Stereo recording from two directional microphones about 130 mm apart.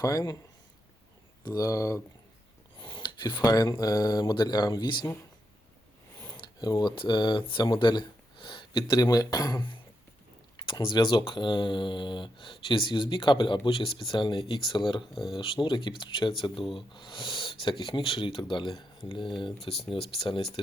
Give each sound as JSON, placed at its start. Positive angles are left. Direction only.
{"t": 0.0, "sound": "speech", "side_deg": 25}
{"t": 1.5, "sound": "speech", "side_deg": 25}
{"t": 2.7, "sound": "speech", "side_deg": 40}
{"t": 6.3, "sound": "speech", "side_deg": 30}
{"t": 15.1, "sound": "speech", "side_deg": 0}
{"t": 15.4, "sound": "speech", "side_deg": 40}